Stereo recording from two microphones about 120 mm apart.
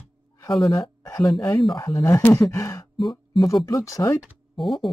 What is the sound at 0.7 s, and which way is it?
Speech, 30° left (ahead or behind).